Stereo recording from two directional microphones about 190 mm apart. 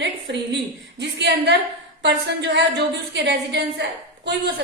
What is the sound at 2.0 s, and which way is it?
A woman's voice, 65° right (ahead or behind).